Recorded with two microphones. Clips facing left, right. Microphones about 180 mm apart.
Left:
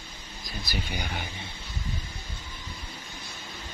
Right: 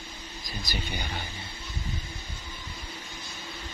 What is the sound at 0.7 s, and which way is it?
Speech, 10° left (ahead or behind).